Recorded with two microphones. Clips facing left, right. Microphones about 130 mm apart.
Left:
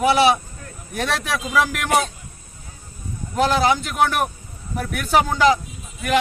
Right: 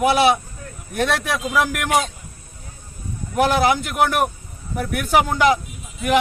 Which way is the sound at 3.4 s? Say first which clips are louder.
Right 1 dB; 15° right (ahead or behind).